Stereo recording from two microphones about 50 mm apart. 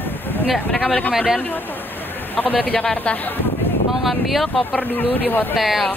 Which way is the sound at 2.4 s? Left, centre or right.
Left.